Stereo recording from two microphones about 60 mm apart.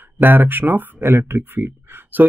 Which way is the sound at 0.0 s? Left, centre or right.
Right.